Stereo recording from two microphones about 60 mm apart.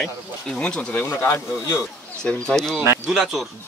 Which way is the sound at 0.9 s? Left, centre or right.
Left.